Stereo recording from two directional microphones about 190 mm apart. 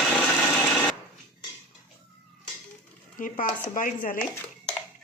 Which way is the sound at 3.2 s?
45° left (ahead or behind).